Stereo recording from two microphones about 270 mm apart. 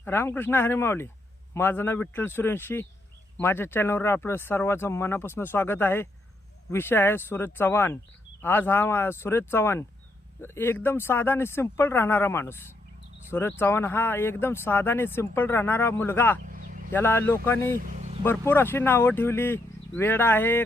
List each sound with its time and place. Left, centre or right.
0.0 s speech: centre
16.5 s a sound: right
16.9 s speech: centre
17.7 s vehicle: right
18.2 s speech: centre